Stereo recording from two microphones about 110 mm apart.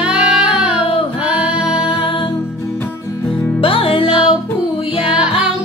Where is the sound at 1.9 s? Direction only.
55° left (ahead or behind).